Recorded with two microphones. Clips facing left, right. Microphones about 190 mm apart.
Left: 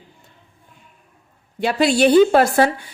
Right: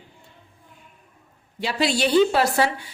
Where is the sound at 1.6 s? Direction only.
50° left (ahead or behind).